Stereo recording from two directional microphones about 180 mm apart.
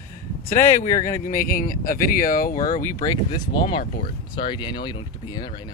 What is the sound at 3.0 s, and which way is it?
Speech, 25° left (ahead or behind).